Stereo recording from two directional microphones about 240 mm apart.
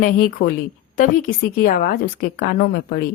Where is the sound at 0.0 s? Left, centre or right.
Left.